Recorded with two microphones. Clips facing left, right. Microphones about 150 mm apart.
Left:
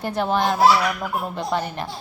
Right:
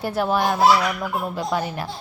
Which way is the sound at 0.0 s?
5° right (ahead or behind).